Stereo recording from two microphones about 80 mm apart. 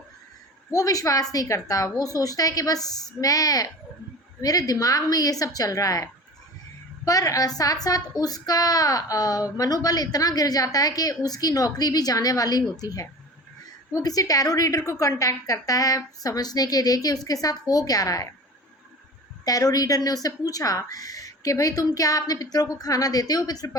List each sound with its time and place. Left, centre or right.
0.7 s a woman's voice: left
19.5 s a woman's voice: left